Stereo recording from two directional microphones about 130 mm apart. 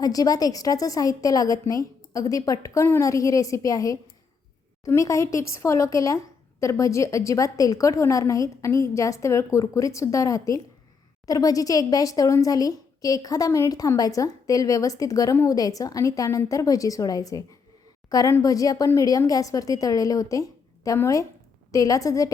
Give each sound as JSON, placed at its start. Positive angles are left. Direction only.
{"t": 0.0, "sound": "a woman's voice", "side_deg": 30}